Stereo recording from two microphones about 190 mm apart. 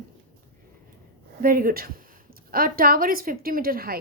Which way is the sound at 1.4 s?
50° right (ahead or behind).